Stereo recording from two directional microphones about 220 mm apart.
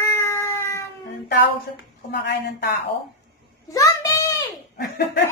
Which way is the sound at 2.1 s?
45° left (ahead or behind).